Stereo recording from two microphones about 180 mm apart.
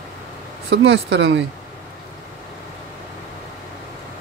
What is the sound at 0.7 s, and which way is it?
Speech, 70° right (ahead or behind).